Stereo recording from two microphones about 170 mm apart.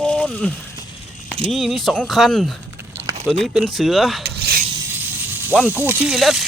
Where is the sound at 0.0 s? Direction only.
5° left (ahead or behind).